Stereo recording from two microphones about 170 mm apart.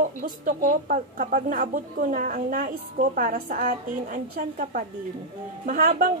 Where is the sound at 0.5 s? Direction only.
50° right (ahead or behind).